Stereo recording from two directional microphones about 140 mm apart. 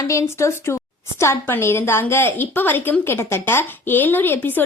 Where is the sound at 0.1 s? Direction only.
20° left (ahead or behind).